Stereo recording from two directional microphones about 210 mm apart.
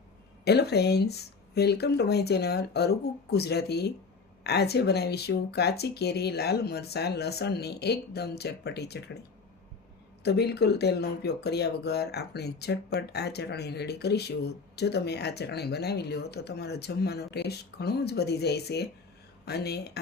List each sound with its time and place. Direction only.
0.4 s speech: 50° left (ahead or behind)
10.2 s speech: 50° left (ahead or behind)